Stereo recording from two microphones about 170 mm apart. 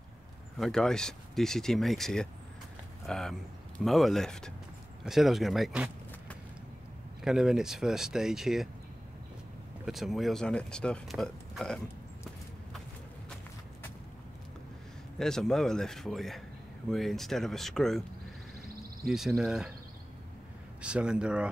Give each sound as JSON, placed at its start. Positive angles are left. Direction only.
{"t": 0.6, "sound": "speech", "side_deg": 5}
{"t": 7.2, "sound": "speech", "side_deg": -5}
{"t": 9.8, "sound": "speech", "side_deg": 0}
{"t": 15.1, "sound": "speech", "side_deg": 5}
{"t": 19.0, "sound": "speech", "side_deg": 0}
{"t": 20.8, "sound": "speech", "side_deg": -5}